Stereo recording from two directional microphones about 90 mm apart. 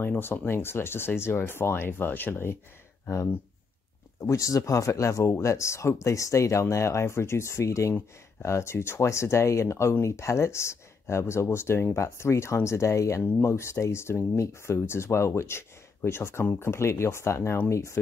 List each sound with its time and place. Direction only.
0.0 s speech: 25° left (ahead or behind)
4.2 s speech: 35° left (ahead or behind)